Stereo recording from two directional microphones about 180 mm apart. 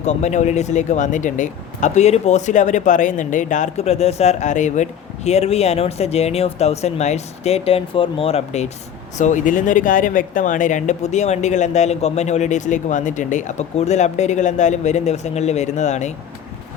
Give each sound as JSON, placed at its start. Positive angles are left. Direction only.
{"t": 0.0, "sound": "speech", "side_deg": 40}